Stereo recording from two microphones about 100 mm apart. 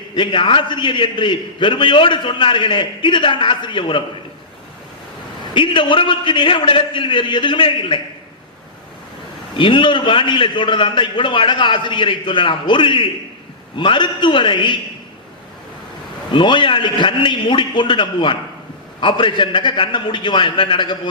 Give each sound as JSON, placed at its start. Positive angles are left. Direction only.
{"t": 0.2, "sound": "a man's voice", "side_deg": 55}
{"t": 5.5, "sound": "a man's voice", "side_deg": 55}
{"t": 9.6, "sound": "a man's voice", "side_deg": 55}
{"t": 16.3, "sound": "a man's voice", "side_deg": 55}